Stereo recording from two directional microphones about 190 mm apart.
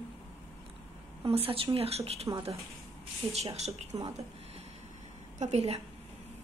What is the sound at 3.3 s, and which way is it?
Speech, 35° right (ahead or behind).